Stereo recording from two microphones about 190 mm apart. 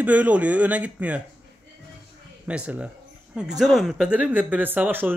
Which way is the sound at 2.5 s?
5° right (ahead or behind).